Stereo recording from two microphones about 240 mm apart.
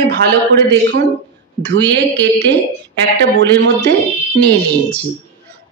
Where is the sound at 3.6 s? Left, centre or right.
Right.